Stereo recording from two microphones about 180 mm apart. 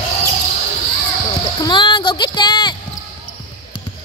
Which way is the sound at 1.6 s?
25° left (ahead or behind).